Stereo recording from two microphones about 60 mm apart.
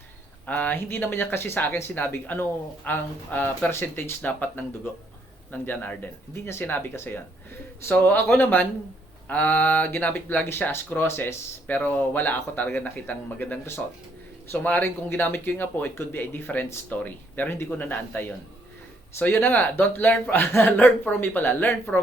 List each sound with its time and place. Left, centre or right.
0.4 s speech: left
3.7 s speech: left
4.2 s speech: left
10.5 s speech: left
11.7 s speech: left
19.2 s speech: left